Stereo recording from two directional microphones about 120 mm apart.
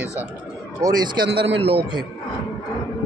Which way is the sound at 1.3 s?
55° right (ahead or behind).